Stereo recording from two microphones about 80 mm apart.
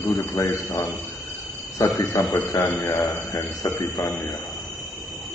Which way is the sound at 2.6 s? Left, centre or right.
Left.